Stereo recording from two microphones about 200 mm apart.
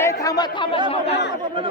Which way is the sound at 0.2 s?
20° left (ahead or behind).